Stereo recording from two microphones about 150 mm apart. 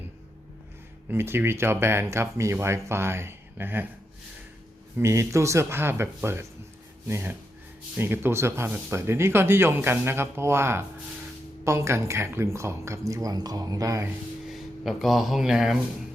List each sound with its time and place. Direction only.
1.1 s speech: 15° right (ahead or behind)
4.9 s speech: 20° right (ahead or behind)
14.5 s speech: centre (ahead or behind)